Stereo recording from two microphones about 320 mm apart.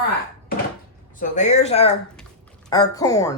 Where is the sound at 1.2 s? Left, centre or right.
Left.